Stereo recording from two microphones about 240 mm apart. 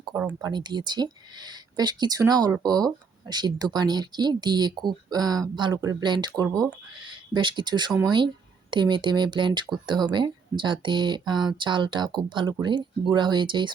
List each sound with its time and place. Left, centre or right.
0.4 s speech: centre